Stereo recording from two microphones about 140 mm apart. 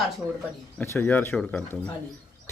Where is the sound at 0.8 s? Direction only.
15° left (ahead or behind).